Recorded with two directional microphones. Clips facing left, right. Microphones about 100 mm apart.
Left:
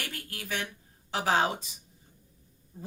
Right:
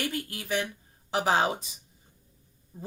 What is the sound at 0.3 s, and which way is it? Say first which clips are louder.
Speech: right 5 dB; 15° right (ahead or behind).